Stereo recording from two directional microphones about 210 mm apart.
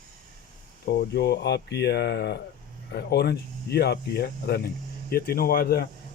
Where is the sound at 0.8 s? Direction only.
50° left (ahead or behind).